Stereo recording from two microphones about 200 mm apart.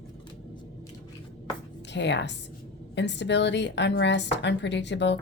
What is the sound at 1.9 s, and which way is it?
A woman's voice, 60° left (ahead or behind).